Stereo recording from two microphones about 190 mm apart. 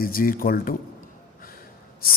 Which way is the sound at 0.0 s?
50° left (ahead or behind).